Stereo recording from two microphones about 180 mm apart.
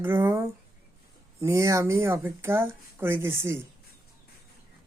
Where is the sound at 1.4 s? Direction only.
15° right (ahead or behind).